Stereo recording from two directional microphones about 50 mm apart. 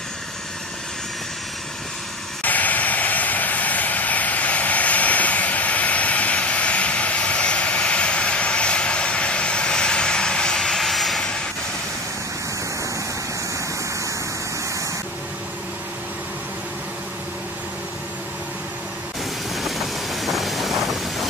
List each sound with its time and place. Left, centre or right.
2.4 s vehicle: left; by 11.2 s centre
19.5 s vehicle: centre